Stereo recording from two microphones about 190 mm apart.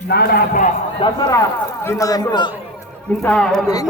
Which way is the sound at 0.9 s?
25° left (ahead or behind).